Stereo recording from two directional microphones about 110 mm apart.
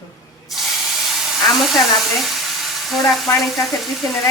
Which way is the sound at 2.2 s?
Centre (ahead or behind).